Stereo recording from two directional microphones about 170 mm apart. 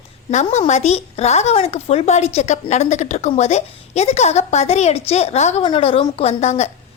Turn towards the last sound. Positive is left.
turn(degrees=40)  # may be behind; listen again after turning